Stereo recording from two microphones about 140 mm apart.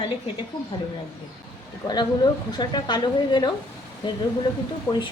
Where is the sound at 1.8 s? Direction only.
30° left (ahead or behind).